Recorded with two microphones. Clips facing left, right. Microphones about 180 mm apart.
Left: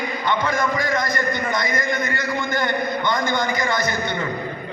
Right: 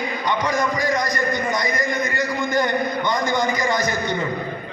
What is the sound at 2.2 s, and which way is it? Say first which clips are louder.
A man's voice: right 3 dB; 15° right (ahead or behind).